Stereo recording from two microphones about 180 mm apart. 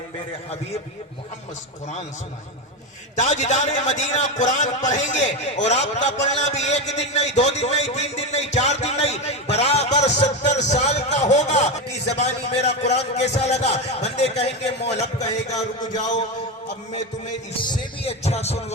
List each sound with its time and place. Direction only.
3.2 s a man's voice: 40° left (ahead or behind)
17.6 s a man's voice: 30° left (ahead or behind)